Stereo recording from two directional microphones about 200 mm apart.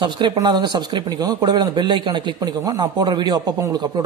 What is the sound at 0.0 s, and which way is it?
Speech, 25° right (ahead or behind).